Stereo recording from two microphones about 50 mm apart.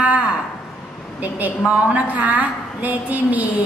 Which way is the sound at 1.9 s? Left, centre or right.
Right.